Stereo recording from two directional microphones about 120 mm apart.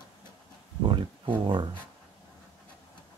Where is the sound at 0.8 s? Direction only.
45° right (ahead or behind).